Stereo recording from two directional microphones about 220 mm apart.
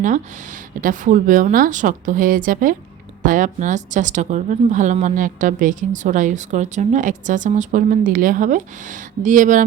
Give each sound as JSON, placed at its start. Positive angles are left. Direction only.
{"t": 0.8, "sound": "speech", "side_deg": -35}